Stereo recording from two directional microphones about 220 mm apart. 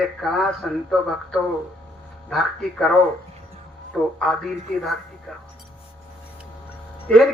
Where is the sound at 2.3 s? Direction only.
Centre (ahead or behind).